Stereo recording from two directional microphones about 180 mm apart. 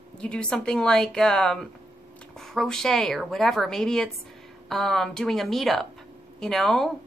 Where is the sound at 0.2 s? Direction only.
5° left (ahead or behind).